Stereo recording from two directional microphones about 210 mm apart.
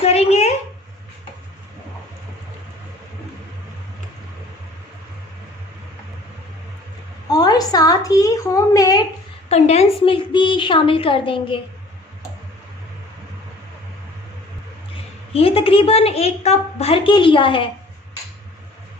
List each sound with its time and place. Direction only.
0.0 s a sound: 30° left (ahead or behind)
7.3 s a woman's voice: 20° left (ahead or behind)
9.5 s a woman's voice: 30° left (ahead or behind)
15.3 s a woman's voice: 25° left (ahead or behind)